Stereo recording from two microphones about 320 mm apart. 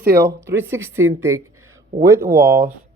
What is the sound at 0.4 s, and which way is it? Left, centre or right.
Speech, centre.